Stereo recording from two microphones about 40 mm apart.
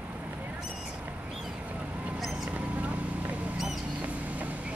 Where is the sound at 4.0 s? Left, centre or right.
Right.